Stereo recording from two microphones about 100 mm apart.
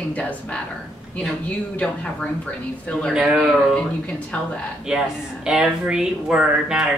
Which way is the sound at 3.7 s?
10° left (ahead or behind).